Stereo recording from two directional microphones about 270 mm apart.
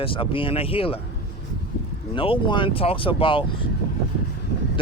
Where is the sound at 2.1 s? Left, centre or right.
Centre.